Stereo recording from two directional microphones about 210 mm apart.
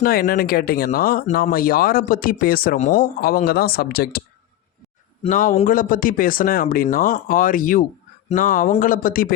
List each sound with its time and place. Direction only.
0.0 s speech: 45° left (ahead or behind)
5.2 s speech: 40° left (ahead or behind)